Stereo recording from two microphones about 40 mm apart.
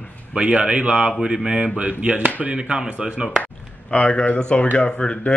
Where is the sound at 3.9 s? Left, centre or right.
Left.